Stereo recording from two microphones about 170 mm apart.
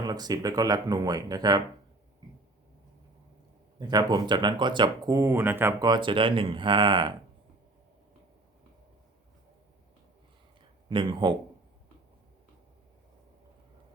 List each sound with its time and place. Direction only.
0.0 s speech: 25° right (ahead or behind)
3.8 s speech: 25° right (ahead or behind)
5.8 s speech: 25° right (ahead or behind)
10.8 s speech: 25° right (ahead or behind)